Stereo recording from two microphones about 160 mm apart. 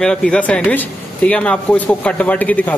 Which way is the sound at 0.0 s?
5° left (ahead or behind).